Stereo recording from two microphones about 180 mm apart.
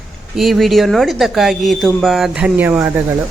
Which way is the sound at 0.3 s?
Centre (ahead or behind).